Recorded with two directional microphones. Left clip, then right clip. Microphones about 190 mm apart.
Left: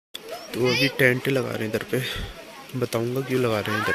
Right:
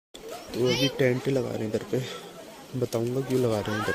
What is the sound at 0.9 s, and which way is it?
Speech, 5° right (ahead or behind).